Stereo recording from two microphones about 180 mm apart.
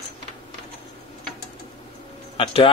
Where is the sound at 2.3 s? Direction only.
30° left (ahead or behind).